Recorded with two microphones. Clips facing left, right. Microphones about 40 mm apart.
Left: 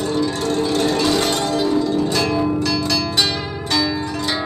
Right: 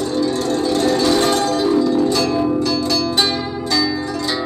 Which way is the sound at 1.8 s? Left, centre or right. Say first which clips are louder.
Right 3 dB; left.